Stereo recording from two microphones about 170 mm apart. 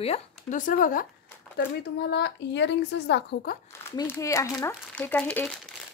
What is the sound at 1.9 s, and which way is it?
A woman's voice, 80° left.